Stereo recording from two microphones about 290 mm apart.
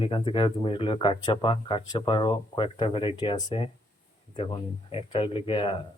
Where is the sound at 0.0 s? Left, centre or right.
Centre.